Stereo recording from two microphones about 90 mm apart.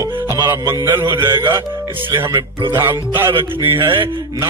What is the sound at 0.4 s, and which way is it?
Mantra, 35° right (ahead or behind).